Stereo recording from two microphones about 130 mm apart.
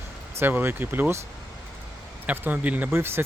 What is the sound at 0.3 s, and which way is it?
Speech, 15° right (ahead or behind).